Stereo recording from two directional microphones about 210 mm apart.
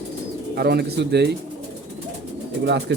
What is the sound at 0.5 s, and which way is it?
Speech, 50° right (ahead or behind).